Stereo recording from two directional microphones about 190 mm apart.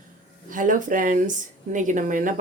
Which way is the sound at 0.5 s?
45° right (ahead or behind).